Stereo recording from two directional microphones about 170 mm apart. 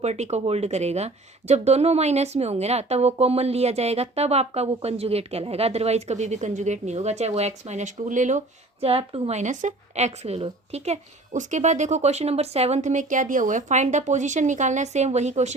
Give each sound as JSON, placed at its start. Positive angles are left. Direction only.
{"t": 0.0, "sound": "speech", "side_deg": -40}